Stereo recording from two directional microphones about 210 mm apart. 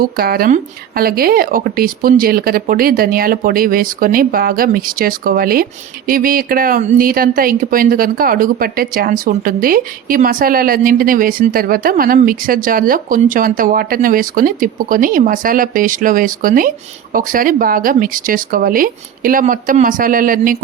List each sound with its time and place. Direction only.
0.0 s a woman's voice: 45° right (ahead or behind)